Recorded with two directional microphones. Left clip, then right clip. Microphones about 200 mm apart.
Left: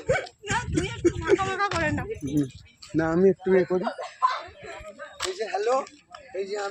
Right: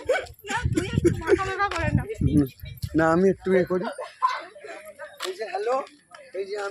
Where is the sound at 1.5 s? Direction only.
Centre (ahead or behind).